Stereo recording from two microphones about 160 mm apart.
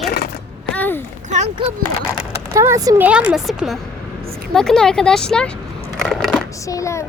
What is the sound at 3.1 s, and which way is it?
Speech, 5° right (ahead or behind).